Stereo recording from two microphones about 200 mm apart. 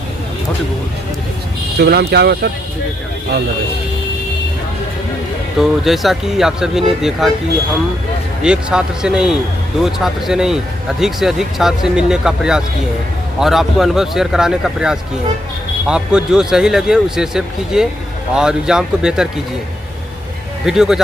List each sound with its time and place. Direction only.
1.8 s speech: 55° right (ahead or behind)
5.5 s speech: centre (ahead or behind)
8.4 s speech: 5° right (ahead or behind)
20.7 s speech: 5° right (ahead or behind)